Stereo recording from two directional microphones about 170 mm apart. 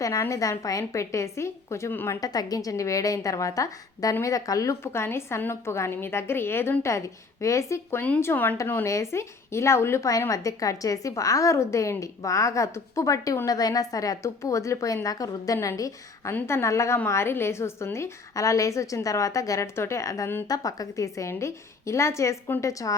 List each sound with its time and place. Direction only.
0.0 s speech: 20° left (ahead or behind)